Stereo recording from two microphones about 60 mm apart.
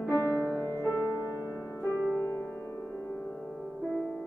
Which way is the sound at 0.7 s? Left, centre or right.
Left.